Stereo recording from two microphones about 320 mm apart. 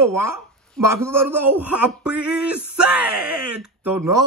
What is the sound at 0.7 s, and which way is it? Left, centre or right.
Speech, right.